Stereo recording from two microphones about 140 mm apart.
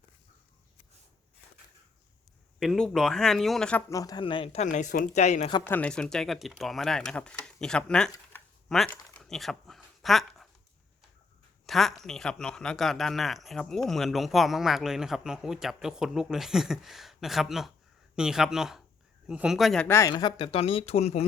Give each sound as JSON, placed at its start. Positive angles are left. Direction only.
{"t": 2.6, "sound": "speech", "side_deg": 5}
{"t": 3.8, "sound": "a man's voice", "side_deg": 25}
{"t": 4.2, "sound": "speech", "side_deg": 40}
{"t": 4.6, "sound": "speech", "side_deg": 60}
{"t": 5.1, "sound": "speech", "side_deg": 55}
{"t": 5.6, "sound": "speech", "side_deg": 10}
{"t": 8.9, "sound": "a sound", "side_deg": 5}
{"t": 11.6, "sound": "speech", "side_deg": 0}
{"t": 19.9, "sound": "speech", "side_deg": 25}